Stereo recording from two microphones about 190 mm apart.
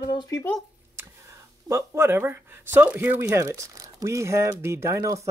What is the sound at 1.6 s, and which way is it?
Speech, 15° right (ahead or behind).